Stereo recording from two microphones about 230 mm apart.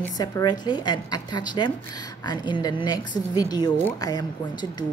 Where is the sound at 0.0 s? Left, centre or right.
Centre.